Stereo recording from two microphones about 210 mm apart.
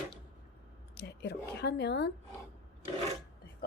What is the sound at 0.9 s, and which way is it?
A woman's voice, 50° left (ahead or behind).